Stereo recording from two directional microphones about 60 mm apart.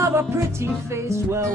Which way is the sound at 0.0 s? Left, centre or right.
Right.